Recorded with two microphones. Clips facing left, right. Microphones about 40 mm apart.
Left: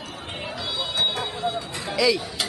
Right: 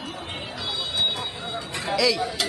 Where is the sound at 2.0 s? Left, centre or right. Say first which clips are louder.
Left 2 dB; centre.